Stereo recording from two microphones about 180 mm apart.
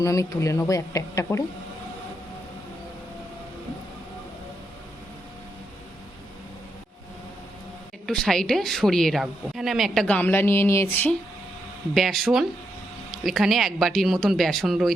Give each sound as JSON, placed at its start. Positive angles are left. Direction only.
{"t": 0.0, "sound": "speech", "side_deg": 20}
{"t": 8.0, "sound": "a woman's voice", "side_deg": 0}
{"t": 11.9, "sound": "a woman's voice", "side_deg": 0}